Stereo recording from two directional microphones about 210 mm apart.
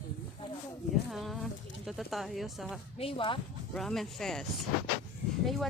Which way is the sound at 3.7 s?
Centre (ahead or behind).